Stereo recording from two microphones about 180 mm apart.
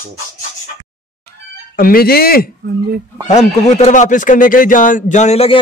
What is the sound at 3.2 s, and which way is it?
Speech, 40° left (ahead or behind).